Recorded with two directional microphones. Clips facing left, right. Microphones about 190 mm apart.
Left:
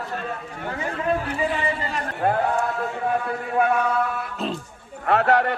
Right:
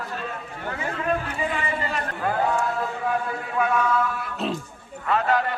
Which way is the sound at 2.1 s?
55° left (ahead or behind).